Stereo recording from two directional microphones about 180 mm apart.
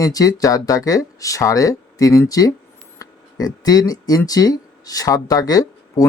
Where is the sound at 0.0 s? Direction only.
20° left (ahead or behind).